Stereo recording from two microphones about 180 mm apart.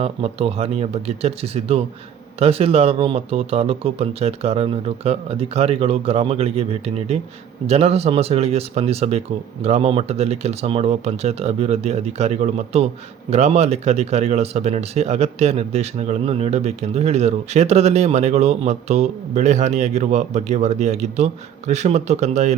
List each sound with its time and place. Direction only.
0.0 s speech: 30° right (ahead or behind)